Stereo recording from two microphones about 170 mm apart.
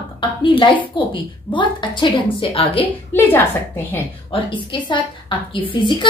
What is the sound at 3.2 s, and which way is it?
Speech, 10° left (ahead or behind).